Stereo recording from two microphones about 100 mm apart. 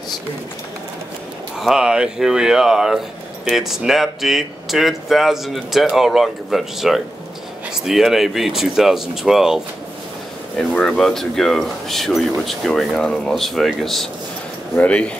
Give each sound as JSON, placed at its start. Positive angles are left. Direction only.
{"t": 1.6, "sound": "speech", "side_deg": -5}
{"t": 10.6, "sound": "speech", "side_deg": 5}